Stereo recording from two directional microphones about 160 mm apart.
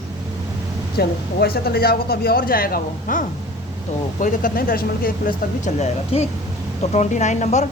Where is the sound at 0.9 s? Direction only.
75° left (ahead or behind).